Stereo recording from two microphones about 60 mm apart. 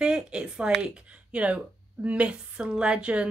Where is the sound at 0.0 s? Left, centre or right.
Centre.